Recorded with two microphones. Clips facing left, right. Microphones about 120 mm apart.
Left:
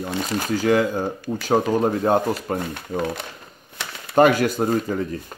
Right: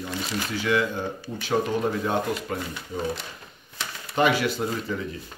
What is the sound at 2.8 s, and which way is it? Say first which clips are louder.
Speech: left 4 dB; 55° left (ahead or behind).